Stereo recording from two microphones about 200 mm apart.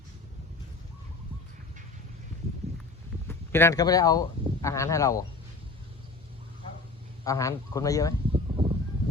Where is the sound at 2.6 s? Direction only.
30° right (ahead or behind).